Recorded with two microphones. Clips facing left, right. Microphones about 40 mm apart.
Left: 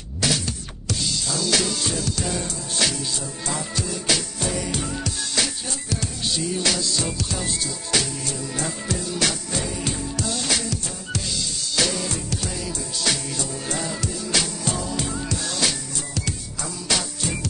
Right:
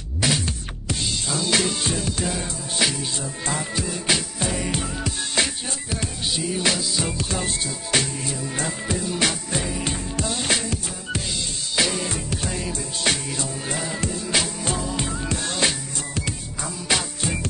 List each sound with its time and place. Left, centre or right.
0.2 s music: right
6.2 s music: centre